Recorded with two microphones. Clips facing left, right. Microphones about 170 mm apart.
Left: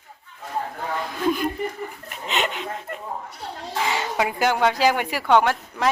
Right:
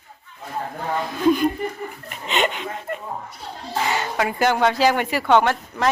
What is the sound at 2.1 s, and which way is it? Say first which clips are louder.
Speech: right 4 dB; centre (ahead or behind).